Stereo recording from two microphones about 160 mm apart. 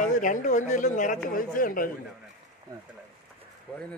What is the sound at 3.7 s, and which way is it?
Speech, 5° left (ahead or behind).